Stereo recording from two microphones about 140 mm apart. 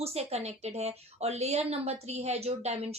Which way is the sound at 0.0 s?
50° right (ahead or behind).